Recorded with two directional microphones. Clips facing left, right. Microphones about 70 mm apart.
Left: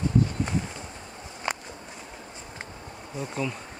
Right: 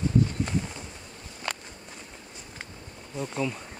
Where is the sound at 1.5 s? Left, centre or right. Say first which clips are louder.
Left 3 dB; left.